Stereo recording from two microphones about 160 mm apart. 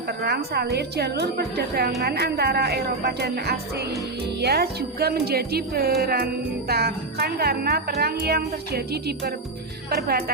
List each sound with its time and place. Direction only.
0.1 s a woman's voice: 75° right (ahead or behind)
9.9 s speech: 75° right (ahead or behind)